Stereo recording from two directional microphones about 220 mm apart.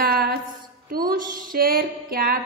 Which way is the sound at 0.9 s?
40° right (ahead or behind).